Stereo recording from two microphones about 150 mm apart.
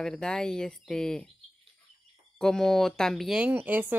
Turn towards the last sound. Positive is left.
turn(degrees=-10)  # may be behind; listen again after turning